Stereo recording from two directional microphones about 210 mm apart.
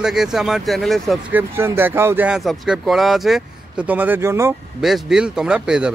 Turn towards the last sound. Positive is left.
turn(degrees=-5)  # may be behind; listen again after turning